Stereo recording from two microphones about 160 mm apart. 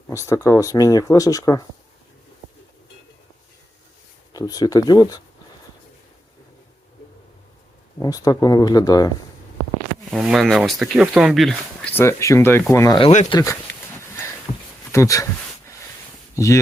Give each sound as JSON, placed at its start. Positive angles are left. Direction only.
{"t": 0.1, "sound": "speech", "side_deg": 20}
{"t": 4.3, "sound": "speech", "side_deg": 25}
{"t": 7.9, "sound": "speech", "side_deg": 25}
{"t": 10.1, "sound": "speech", "side_deg": -5}
{"t": 11.9, "sound": "speech", "side_deg": 20}
{"t": 13.0, "sound": "speech", "side_deg": 45}
{"t": 13.3, "sound": "speech", "side_deg": 20}
{"t": 14.9, "sound": "a sound", "side_deg": 20}
{"t": 16.3, "sound": "speech", "side_deg": 20}